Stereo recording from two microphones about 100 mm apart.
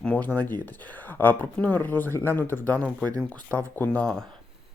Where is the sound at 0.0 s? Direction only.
10° left (ahead or behind).